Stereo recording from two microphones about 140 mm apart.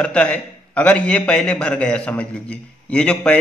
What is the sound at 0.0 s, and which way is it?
A man's voice, 10° left (ahead or behind).